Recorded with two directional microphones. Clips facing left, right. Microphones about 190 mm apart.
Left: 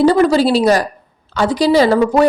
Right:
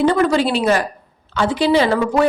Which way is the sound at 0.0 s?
35° left (ahead or behind).